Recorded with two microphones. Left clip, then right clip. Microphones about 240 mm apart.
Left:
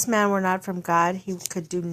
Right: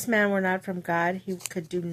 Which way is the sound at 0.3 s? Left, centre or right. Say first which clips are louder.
Left 3 dB; left.